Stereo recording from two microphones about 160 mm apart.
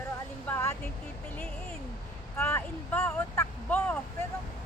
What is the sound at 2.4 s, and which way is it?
Speech, 15° left (ahead or behind).